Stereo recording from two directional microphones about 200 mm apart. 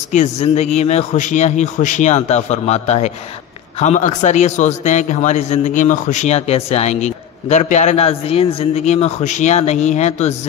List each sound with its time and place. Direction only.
0.1 s a man's voice: 35° left (ahead or behind)